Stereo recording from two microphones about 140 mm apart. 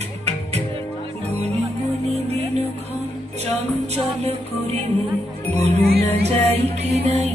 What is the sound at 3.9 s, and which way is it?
Music, 50° right (ahead or behind).